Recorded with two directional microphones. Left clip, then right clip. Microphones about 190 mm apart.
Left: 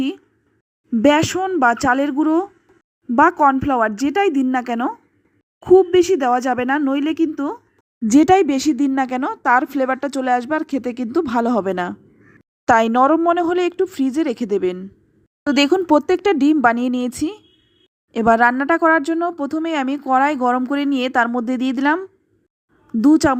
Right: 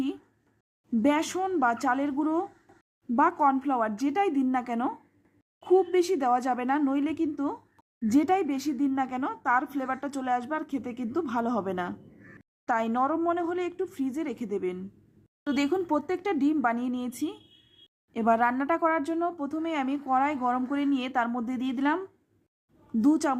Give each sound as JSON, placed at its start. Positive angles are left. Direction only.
{"t": 1.0, "sound": "speech", "side_deg": 30}